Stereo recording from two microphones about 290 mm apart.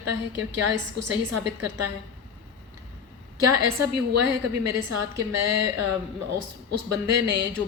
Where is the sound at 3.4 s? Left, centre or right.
Right.